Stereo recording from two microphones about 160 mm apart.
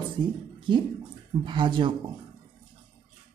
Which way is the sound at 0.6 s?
30° right (ahead or behind).